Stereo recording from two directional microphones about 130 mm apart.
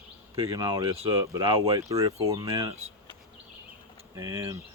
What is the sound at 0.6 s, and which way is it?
Speech, 30° right (ahead or behind).